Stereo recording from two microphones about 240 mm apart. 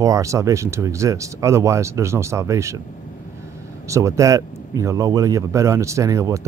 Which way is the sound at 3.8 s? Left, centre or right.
Centre.